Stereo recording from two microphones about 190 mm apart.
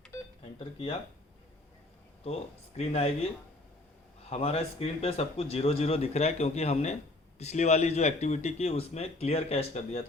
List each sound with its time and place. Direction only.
2.2 s speech: 35° left (ahead or behind)
4.3 s speech: 30° left (ahead or behind)